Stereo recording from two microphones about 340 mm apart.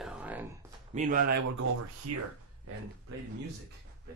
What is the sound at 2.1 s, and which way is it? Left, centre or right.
Speech, right.